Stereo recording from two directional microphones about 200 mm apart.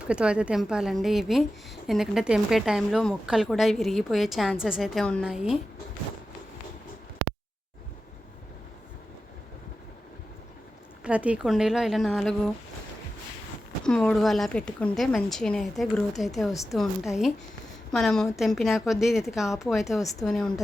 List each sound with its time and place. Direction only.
0.1 s a woman's voice: 5° right (ahead or behind)
11.0 s a woman's voice: 5° right (ahead or behind)
13.8 s a woman's voice: 5° left (ahead or behind)
20.0 s a woman's voice: 15° left (ahead or behind)
20.2 s a woman's voice: 5° left (ahead or behind)